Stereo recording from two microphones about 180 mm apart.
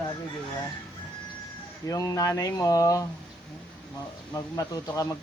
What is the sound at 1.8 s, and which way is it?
Speech, 20° left (ahead or behind).